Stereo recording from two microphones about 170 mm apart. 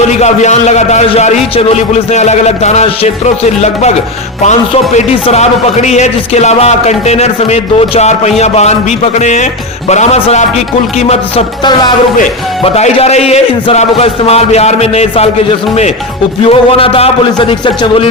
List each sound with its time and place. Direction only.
0.2 s speech: 40° left (ahead or behind)
4.9 s speech: 35° left (ahead or behind)
11.6 s speech: 25° left (ahead or behind)
12.6 s speech: 35° left (ahead or behind)
16.5 s speech: 35° left (ahead or behind)